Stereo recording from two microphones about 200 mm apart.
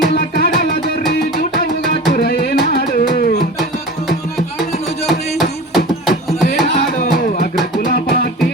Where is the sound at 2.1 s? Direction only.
50° left (ahead or behind).